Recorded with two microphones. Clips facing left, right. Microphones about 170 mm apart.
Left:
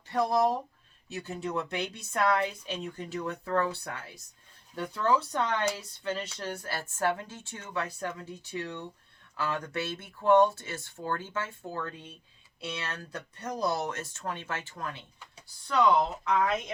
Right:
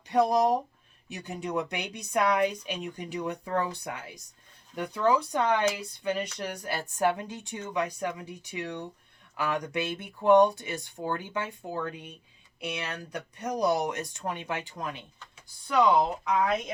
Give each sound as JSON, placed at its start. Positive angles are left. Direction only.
{"t": 0.1, "sound": "speech", "side_deg": -15}